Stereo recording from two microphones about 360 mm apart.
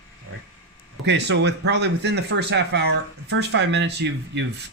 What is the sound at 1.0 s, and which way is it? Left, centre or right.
Speech, right.